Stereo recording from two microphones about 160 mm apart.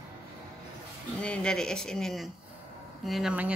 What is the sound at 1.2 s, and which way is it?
Speech, 5° left (ahead or behind).